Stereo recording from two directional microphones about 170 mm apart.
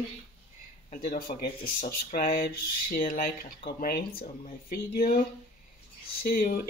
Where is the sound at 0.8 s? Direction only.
60° left (ahead or behind).